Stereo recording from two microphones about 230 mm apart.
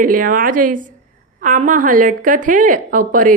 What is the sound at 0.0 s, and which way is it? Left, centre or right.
Speech, right.